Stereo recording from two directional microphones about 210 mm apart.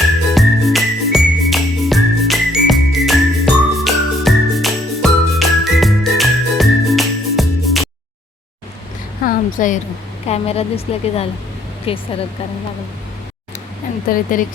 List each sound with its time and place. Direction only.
0.3 s music: centre (ahead or behind)
9.2 s a sound: 40° left (ahead or behind)
10.2 s a woman's voice: 30° left (ahead or behind)
14.1 s speech: 40° left (ahead or behind)